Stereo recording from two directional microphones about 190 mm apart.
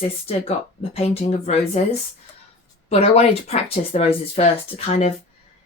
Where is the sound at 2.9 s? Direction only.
35° left (ahead or behind).